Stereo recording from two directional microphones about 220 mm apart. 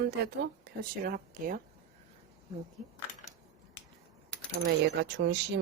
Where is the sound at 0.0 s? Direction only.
45° right (ahead or behind).